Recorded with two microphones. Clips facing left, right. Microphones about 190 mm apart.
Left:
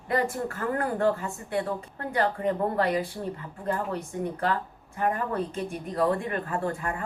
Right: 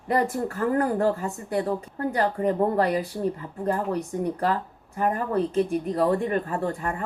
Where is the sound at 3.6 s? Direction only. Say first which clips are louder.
Right 4 dB; 40° right (ahead or behind).